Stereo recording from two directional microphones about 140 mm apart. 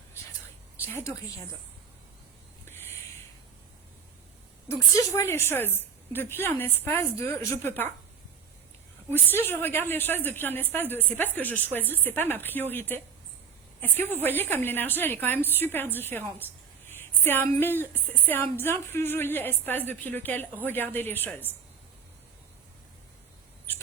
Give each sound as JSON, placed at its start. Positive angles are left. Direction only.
{"t": 4.7, "sound": "a woman's voice", "side_deg": 20}
{"t": 9.1, "sound": "a woman's voice", "side_deg": 15}